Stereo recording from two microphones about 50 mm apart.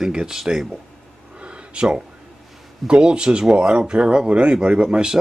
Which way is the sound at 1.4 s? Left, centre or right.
Right.